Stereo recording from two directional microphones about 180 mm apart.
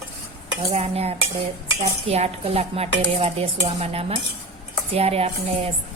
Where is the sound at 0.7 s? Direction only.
35° right (ahead or behind).